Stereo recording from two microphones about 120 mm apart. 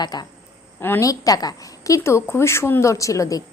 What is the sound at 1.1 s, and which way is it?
A woman's voice, 30° left (ahead or behind).